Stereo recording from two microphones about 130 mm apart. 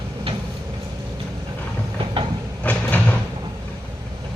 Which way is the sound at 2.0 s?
40° right (ahead or behind).